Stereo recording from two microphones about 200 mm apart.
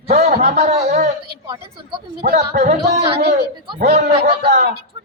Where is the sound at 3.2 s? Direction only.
55° right (ahead or behind).